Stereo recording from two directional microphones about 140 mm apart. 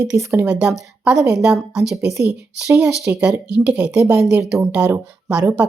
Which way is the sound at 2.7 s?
15° right (ahead or behind).